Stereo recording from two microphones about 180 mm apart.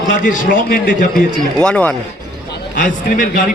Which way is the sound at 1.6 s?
10° left (ahead or behind).